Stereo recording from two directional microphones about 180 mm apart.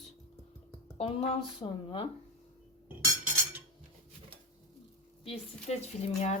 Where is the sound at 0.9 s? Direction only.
35° left (ahead or behind).